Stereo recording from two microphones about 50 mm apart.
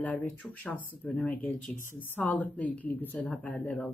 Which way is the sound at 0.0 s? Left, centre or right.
Left.